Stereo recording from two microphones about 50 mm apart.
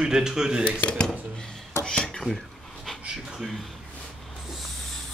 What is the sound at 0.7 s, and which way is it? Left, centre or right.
Speech, left.